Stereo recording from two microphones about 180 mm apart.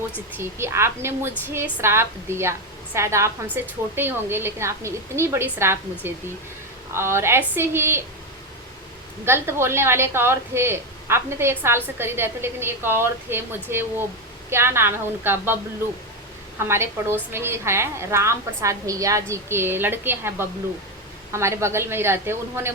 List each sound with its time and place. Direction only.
0.3 s a woman's voice: 15° right (ahead or behind)
9.2 s a woman's voice: 15° right (ahead or behind)
16.6 s a woman's voice: 15° right (ahead or behind)
21.3 s a woman's voice: 15° right (ahead or behind)